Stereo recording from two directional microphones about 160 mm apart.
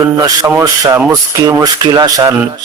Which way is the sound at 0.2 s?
20° right (ahead or behind).